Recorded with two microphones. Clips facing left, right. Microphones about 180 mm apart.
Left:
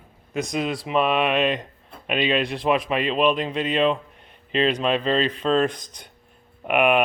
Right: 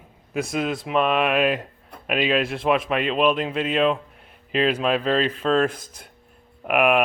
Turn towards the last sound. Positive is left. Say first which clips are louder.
# even
turn(degrees=0)  # may be behind; listen again after turning